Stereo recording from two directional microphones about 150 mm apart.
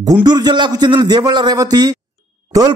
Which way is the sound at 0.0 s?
25° right (ahead or behind).